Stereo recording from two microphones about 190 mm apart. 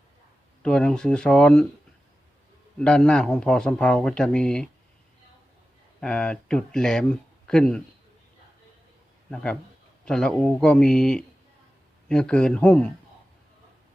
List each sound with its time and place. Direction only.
0.6 s speech: 5° left (ahead or behind)
2.7 s speech: 5° left (ahead or behind)
6.0 s speech: 5° left (ahead or behind)
9.3 s speech: 5° left (ahead or behind)